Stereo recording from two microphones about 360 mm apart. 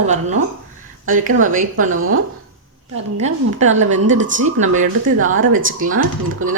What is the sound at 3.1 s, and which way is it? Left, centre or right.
A woman's voice, centre.